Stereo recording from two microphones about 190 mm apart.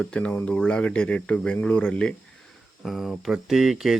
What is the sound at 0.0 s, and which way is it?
Speech, 5° left (ahead or behind).